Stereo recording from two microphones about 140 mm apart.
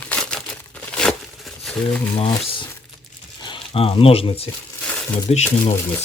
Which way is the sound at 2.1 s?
35° left (ahead or behind).